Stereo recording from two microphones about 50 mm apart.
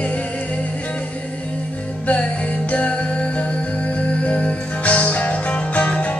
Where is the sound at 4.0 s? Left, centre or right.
Left.